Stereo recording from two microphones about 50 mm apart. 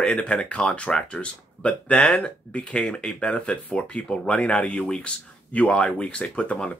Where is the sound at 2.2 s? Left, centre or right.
Left.